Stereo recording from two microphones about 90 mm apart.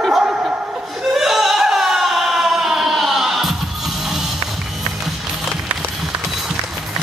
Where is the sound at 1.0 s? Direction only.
5° right (ahead or behind).